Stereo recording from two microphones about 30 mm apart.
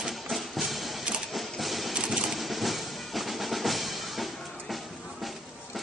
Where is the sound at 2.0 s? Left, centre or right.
Right.